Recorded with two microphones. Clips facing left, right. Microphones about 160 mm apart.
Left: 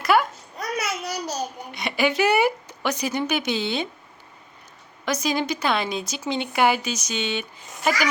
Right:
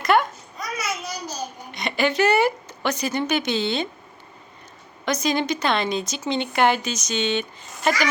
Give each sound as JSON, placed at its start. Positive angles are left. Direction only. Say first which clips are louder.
{"t": 0.0, "sound": "babbling", "louder": "right 1 dB", "side_deg": 5}
{"t": 0.6, "sound": "babbling", "louder": "left 2 dB", "side_deg": 70}
{"t": 1.7, "sound": "a woman's voice", "louder": "right 1 dB", "side_deg": 10}
{"t": 5.0, "sound": "a woman's voice", "louder": "right 2 dB", "side_deg": 5}